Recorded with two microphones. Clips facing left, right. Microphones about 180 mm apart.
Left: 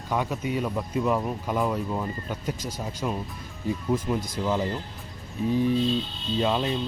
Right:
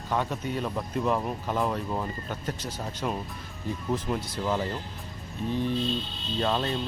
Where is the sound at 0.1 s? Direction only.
10° left (ahead or behind).